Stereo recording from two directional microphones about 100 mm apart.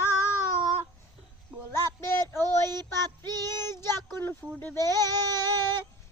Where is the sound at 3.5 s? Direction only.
25° left (ahead or behind).